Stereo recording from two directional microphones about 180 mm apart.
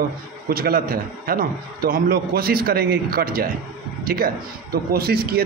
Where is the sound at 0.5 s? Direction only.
55° right (ahead or behind).